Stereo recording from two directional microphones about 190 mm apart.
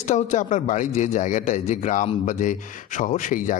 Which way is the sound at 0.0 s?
40° left (ahead or behind).